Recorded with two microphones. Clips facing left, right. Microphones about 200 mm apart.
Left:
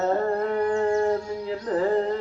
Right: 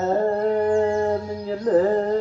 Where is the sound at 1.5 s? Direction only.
40° right (ahead or behind).